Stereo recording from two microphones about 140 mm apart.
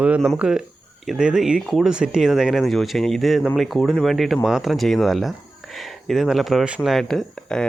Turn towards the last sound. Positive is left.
turn(degrees=5)  # may be behind; listen again after turning